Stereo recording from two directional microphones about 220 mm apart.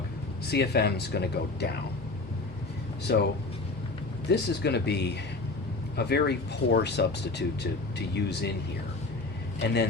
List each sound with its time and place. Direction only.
0.4 s speech: 50° left (ahead or behind)
3.1 s speech: 50° left (ahead or behind)
4.3 s speech: 50° left (ahead or behind)